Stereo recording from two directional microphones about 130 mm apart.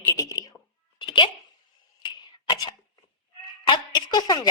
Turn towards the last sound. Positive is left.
turn(degrees=35)  # may be behind; listen again after turning